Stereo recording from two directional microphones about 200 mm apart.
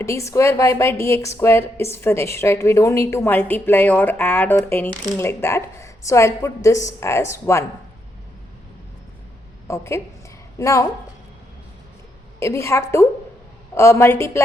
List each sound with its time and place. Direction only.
0.0 s a woman's voice: 15° left (ahead or behind)
9.6 s a woman's voice: 15° left (ahead or behind)
12.4 s a woman's voice: 15° left (ahead or behind)